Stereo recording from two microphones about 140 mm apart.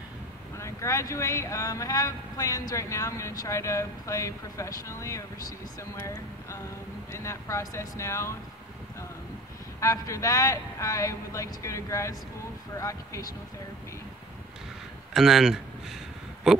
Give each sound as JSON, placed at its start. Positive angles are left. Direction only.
{"t": 0.6, "sound": "speech", "side_deg": 20}
{"t": 9.8, "sound": "speech", "side_deg": 20}
{"t": 15.1, "sound": "speech", "side_deg": 0}